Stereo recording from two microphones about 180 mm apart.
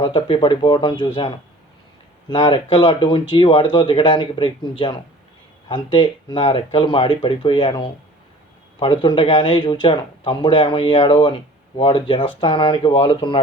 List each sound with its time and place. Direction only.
0.0 s speech: 25° left (ahead or behind)
2.3 s speech: 25° left (ahead or behind)